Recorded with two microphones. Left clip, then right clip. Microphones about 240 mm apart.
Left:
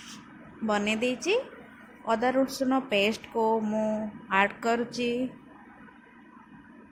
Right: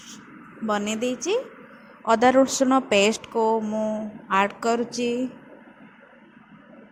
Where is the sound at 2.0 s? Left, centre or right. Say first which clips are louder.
Right 8 dB; right; by 4.0 s centre.